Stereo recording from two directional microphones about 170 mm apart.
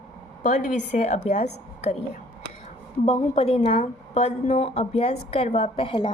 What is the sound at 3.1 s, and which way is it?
A woman's voice, 35° left (ahead or behind).